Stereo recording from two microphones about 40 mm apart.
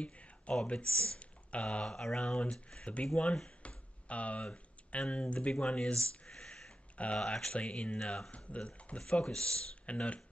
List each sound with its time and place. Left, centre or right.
0.0 s a sound: left
0.7 s speech: left
7.0 s speech: left
8.0 s speech: centre
8.5 s speech: left